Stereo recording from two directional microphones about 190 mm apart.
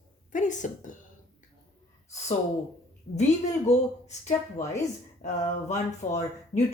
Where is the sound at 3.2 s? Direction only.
35° left (ahead or behind).